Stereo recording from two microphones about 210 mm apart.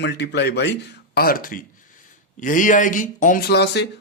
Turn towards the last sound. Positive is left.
turn(degrees=55)  # may be behind; listen again after turning